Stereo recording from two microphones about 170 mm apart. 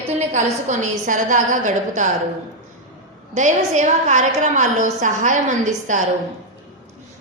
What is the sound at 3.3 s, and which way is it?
A woman's voice, 45° right (ahead or behind).